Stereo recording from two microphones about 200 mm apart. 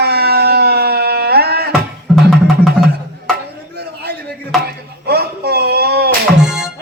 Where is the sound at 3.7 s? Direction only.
50° right (ahead or behind).